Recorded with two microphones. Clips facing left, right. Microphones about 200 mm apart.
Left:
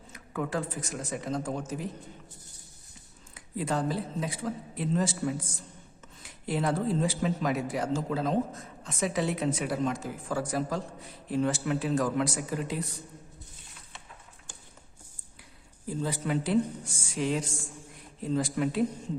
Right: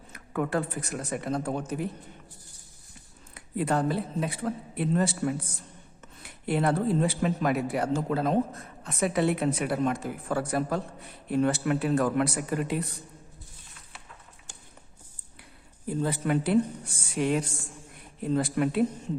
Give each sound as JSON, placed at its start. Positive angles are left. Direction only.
{"t": 0.1, "sound": "speech", "side_deg": -60}
{"t": 3.3, "sound": "speech", "side_deg": -60}
{"t": 15.9, "sound": "speech", "side_deg": -55}